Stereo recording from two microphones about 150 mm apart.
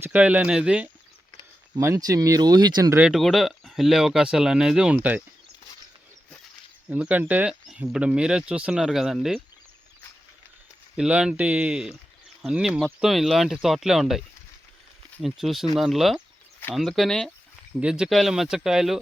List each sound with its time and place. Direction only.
0.0 s speech: 10° right (ahead or behind)
1.8 s speech: 20° right (ahead or behind)
2.9 s speech: 5° right (ahead or behind)
6.8 s speech: 10° right (ahead or behind)
10.9 s speech: 5° right (ahead or behind)